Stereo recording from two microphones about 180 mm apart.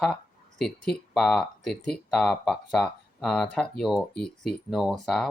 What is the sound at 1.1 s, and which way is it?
Speech, 5° left (ahead or behind).